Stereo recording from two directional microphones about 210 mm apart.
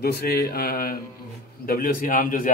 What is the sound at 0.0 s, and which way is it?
A man's voice, 45° left (ahead or behind).